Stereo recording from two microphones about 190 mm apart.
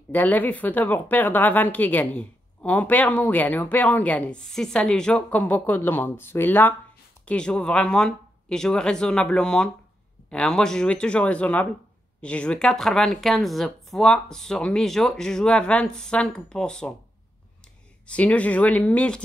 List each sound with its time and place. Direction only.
0.1 s speech: 10° left (ahead or behind)
18.0 s speech: 5° left (ahead or behind)